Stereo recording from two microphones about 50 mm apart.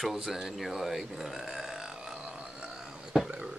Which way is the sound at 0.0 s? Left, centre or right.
Centre.